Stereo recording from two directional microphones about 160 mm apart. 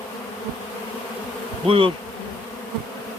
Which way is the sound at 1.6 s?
35° right (ahead or behind).